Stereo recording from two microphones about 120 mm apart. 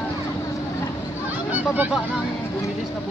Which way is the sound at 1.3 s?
15° right (ahead or behind).